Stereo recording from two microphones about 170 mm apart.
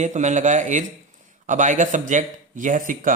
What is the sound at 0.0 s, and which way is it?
Speech, 45° right (ahead or behind).